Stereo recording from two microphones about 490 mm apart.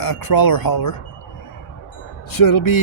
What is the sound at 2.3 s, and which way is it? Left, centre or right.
Speech, left.